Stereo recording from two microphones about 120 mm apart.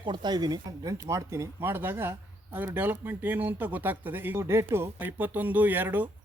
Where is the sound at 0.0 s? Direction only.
40° right (ahead or behind).